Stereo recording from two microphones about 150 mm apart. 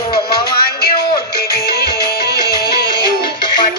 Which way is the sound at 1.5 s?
90° left.